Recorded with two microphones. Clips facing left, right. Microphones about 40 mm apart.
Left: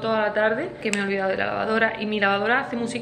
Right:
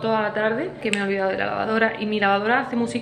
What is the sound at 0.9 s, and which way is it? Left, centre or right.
Speech, right.